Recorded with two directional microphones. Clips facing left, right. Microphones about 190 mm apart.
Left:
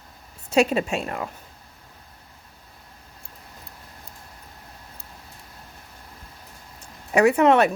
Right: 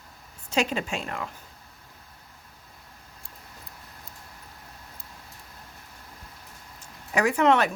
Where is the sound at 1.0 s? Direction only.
25° left (ahead or behind).